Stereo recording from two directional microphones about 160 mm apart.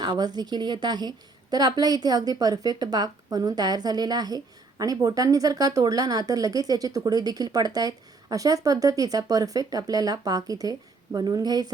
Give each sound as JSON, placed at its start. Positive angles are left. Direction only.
{"t": 0.0, "sound": "speech", "side_deg": -25}